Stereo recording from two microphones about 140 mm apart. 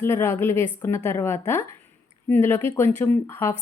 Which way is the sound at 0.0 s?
15° left (ahead or behind).